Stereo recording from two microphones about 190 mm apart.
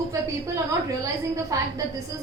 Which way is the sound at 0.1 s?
15° right (ahead or behind).